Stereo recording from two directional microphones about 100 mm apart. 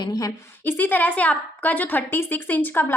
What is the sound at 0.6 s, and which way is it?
A woman's voice, 20° left (ahead or behind).